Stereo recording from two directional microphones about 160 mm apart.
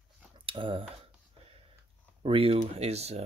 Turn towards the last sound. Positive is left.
turn(degrees=-40)  # may be behind; listen again after turning